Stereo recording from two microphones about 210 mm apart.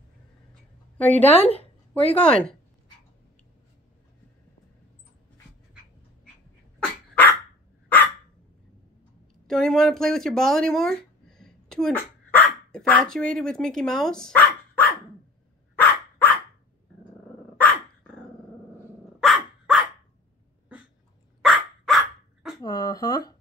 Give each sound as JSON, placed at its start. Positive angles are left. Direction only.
{"t": 0.9, "sound": "a woman's voice", "side_deg": 5}
{"t": 1.3, "sound": "speech", "side_deg": 30}
{"t": 2.1, "sound": "speech", "side_deg": 5}
{"t": 9.5, "sound": "speech", "side_deg": 0}
{"t": 15.8, "sound": "dog", "side_deg": 5}
{"t": 17.6, "sound": "dog", "side_deg": 5}
{"t": 19.1, "sound": "dog", "side_deg": 0}
{"t": 21.4, "sound": "dog", "side_deg": 0}
{"t": 22.6, "sound": "a sound", "side_deg": 20}